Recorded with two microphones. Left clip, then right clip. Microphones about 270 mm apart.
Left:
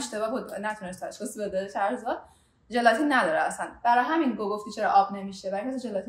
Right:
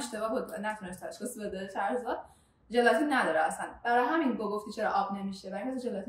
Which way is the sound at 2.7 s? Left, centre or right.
Left.